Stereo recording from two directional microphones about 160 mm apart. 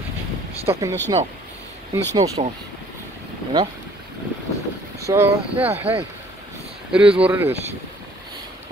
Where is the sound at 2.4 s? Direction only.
45° right (ahead or behind).